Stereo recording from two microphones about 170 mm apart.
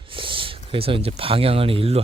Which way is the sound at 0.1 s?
30° right (ahead or behind).